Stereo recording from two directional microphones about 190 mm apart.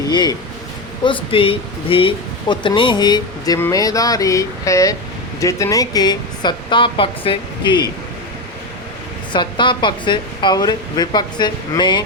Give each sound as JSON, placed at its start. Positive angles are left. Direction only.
{"t": 0.1, "sound": "speech", "side_deg": 20}
{"t": 9.3, "sound": "speech", "side_deg": 25}